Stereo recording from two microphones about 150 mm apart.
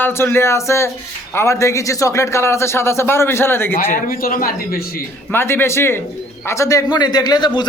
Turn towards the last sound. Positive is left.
turn(degrees=30)  # may be behind; listen again after turning